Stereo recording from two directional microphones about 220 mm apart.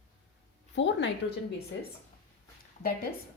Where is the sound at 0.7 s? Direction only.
55° left (ahead or behind).